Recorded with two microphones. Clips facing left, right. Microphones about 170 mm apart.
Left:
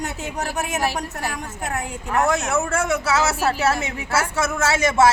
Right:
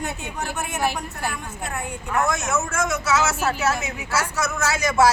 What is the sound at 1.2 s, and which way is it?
Speech, centre (ahead or behind).